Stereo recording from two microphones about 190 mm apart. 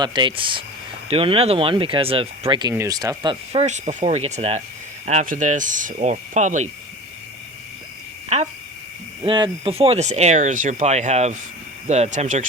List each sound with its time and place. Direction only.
0.0 s speech: 25° right (ahead or behind)
3.5 s speech: 35° right (ahead or behind)
8.3 s speech: 35° right (ahead or behind)
9.2 s speech: 25° right (ahead or behind)